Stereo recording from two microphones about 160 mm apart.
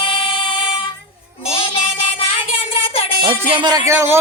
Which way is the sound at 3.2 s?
30° right (ahead or behind).